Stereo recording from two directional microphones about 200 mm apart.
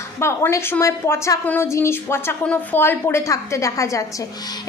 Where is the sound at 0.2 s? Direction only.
15° left (ahead or behind).